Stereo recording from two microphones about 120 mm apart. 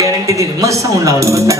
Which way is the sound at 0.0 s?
25° right (ahead or behind).